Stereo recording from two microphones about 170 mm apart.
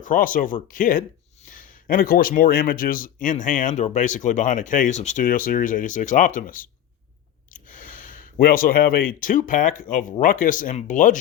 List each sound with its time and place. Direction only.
0.0 s a man's voice: 50° left (ahead or behind)